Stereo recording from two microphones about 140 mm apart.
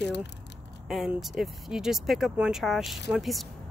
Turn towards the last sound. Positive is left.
turn(degrees=0)  # may be behind; listen again after turning